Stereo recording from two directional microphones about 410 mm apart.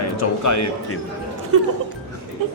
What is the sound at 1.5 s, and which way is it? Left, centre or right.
Speech, right.